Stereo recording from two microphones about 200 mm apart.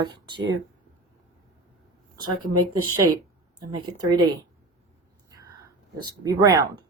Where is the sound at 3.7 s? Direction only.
20° right (ahead or behind).